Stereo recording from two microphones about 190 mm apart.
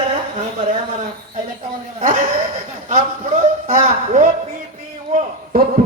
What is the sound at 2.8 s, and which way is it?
A man's voice, 35° right (ahead or behind).